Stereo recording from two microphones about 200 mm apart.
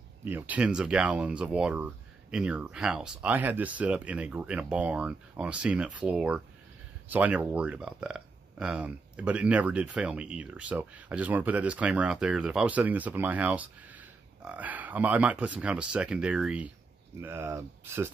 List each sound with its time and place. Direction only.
0.2 s speech: 10° right (ahead or behind)